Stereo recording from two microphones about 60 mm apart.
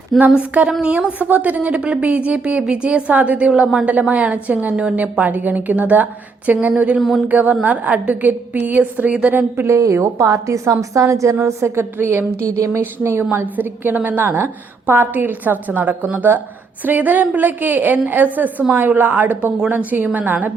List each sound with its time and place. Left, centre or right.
0.3 s a woman's voice: right
3.5 s speech: centre
3.8 s a woman's voice: right
9.6 s a woman's voice: right